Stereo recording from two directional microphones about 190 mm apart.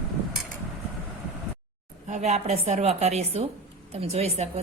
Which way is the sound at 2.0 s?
35° right (ahead or behind).